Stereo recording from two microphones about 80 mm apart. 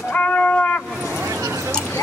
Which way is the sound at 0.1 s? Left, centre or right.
Centre.